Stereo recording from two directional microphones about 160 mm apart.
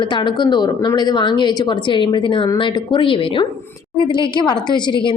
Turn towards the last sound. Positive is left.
turn(degrees=30)  # may be behind; listen again after turning